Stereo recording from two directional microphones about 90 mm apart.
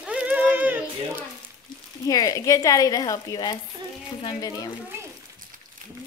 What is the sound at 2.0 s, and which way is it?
Speech, 40° left (ahead or behind).